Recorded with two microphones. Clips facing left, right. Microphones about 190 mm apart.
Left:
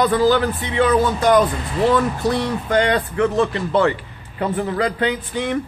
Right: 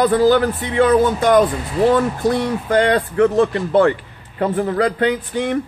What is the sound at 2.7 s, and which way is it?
Speech, 35° right (ahead or behind).